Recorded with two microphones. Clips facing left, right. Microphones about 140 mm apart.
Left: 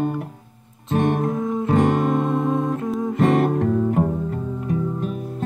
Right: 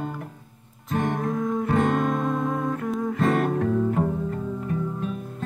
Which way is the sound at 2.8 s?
5° left (ahead or behind).